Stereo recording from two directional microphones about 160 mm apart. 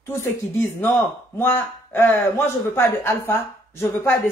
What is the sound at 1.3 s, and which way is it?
Speech, 15° left (ahead or behind).